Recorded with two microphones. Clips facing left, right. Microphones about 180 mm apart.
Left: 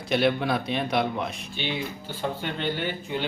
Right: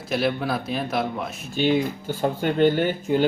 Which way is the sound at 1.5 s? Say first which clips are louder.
Right 15 dB; 45° right (ahead or behind).